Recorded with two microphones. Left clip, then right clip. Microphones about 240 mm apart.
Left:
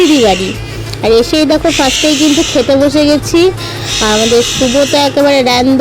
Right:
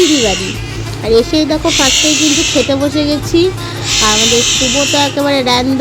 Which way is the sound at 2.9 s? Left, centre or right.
Left.